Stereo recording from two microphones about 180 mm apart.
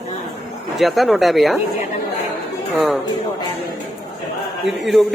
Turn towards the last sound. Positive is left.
turn(degrees=0)  # may be behind; listen again after turning